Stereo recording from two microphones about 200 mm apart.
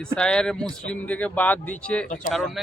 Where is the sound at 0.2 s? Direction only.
5° left (ahead or behind).